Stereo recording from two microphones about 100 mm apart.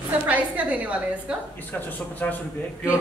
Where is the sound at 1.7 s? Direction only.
15° left (ahead or behind).